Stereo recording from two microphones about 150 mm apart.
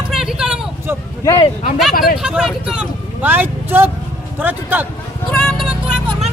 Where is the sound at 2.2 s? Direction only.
5° right (ahead or behind).